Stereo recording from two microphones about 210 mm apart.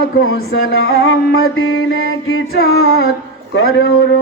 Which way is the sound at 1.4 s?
75° left (ahead or behind).